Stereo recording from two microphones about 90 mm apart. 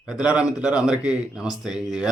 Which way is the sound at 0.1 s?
10° right (ahead or behind).